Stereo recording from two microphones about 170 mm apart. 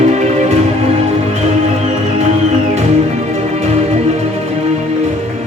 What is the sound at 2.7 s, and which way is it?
Music, 40° right (ahead or behind).